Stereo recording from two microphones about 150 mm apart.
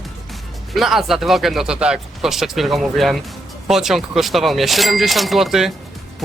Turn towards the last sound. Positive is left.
turn(degrees=0)  # may be behind; listen again after turning